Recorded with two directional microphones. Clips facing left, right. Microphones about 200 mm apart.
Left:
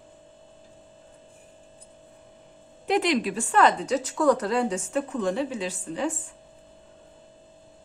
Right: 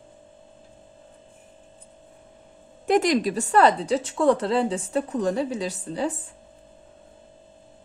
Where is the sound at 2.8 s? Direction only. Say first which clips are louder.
Right 3 dB; 45° right (ahead or behind).